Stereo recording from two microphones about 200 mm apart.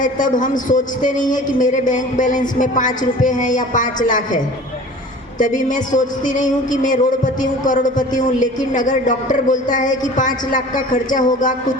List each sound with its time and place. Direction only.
0.0 s a woman's voice: 40° left (ahead or behind)
5.4 s a woman's voice: 40° left (ahead or behind)